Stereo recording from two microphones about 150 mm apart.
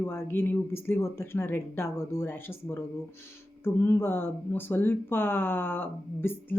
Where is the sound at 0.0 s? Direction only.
15° left (ahead or behind).